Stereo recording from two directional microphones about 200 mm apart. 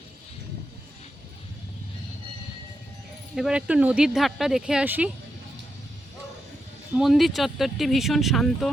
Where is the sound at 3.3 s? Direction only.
5° right (ahead or behind).